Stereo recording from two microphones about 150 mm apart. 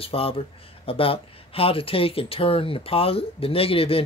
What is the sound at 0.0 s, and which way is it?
Speech, 40° left (ahead or behind).